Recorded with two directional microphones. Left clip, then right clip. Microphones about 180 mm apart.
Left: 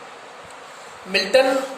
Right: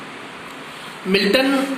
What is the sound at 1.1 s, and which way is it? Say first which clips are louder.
Speech: even; 35° left (ahead or behind).